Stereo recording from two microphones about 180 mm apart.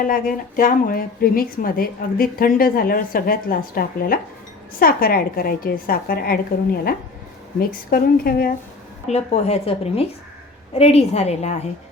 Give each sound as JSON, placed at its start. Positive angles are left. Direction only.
{"t": 0.0, "sound": "a woman's voice", "side_deg": 50}
{"t": 7.6, "sound": "a woman's voice", "side_deg": 55}
{"t": 9.0, "sound": "a woman's voice", "side_deg": 35}